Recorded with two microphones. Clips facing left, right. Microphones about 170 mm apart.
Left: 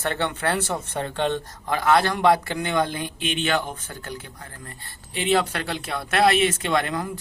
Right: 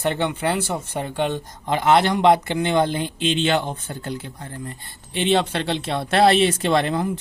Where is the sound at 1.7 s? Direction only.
20° right (ahead or behind).